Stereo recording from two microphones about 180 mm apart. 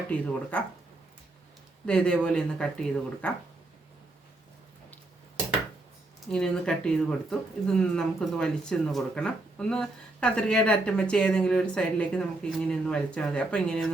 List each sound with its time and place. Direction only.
0.5 s speech: 10° left (ahead or behind)
1.9 s speech: 5° left (ahead or behind)
6.3 s speech: 5° left (ahead or behind)